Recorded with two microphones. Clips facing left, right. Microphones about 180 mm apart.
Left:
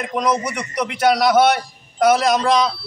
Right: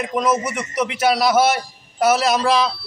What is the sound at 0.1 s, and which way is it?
A man's voice, 5° right (ahead or behind).